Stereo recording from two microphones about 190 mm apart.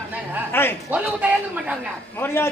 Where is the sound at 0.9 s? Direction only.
5° right (ahead or behind).